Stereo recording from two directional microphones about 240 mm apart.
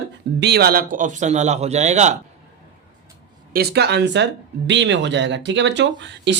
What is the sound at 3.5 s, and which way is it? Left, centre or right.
Speech, right.